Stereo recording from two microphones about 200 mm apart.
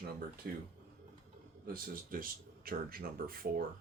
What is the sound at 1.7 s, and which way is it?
Speech, 45° right (ahead or behind).